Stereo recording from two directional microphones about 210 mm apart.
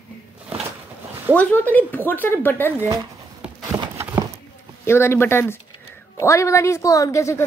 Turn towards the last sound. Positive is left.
turn(degrees=15)  # may be behind; listen again after turning